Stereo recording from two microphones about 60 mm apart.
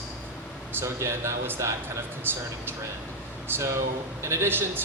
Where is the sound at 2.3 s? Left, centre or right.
Right.